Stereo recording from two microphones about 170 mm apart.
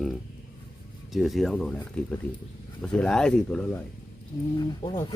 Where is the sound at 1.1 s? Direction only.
Centre (ahead or behind).